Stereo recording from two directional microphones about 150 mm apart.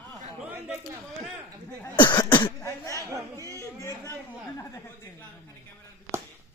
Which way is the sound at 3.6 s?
20° left (ahead or behind).